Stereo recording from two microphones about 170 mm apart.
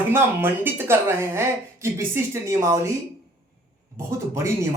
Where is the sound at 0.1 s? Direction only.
15° right (ahead or behind).